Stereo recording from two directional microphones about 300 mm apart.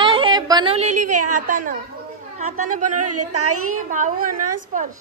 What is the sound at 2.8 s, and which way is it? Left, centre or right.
Music, right.